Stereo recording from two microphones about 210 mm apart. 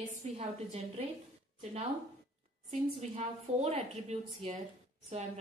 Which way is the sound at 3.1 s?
30° right (ahead or behind).